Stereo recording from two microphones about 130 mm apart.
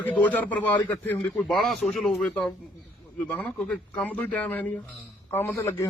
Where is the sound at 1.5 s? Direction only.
Centre (ahead or behind).